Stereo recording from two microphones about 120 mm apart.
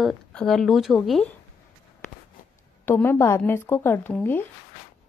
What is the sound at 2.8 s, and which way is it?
A woman's voice, 15° left (ahead or behind).